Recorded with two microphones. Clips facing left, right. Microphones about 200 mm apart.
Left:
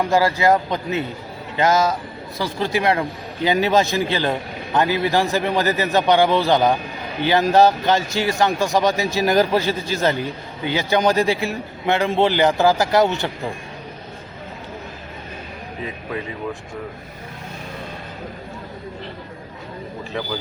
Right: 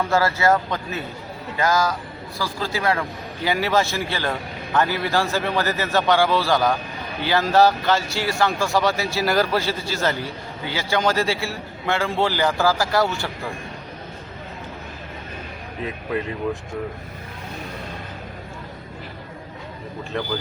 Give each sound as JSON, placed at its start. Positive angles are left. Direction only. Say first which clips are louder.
{"t": 0.0, "sound": "a man's voice", "louder": "left 2 dB", "side_deg": 15}
{"t": 15.8, "sound": "speech", "louder": "right 3 dB", "side_deg": 0}
{"t": 20.1, "sound": "speech", "louder": "right 1 dB", "side_deg": 0}